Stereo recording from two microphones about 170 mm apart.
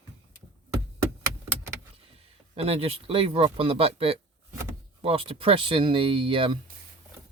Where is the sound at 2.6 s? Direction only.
35° right (ahead or behind).